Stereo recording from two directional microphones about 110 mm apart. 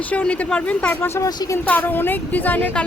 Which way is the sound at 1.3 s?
40° left (ahead or behind).